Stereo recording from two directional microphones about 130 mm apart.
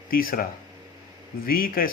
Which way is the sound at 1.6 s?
90° left.